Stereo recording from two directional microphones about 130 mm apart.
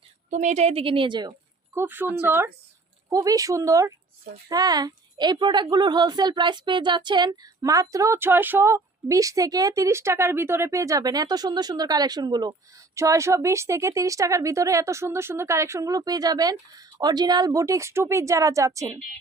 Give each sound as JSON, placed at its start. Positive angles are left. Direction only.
{"t": 0.3, "sound": "a woman's voice", "side_deg": -70}
{"t": 1.7, "sound": "a woman's voice", "side_deg": -15}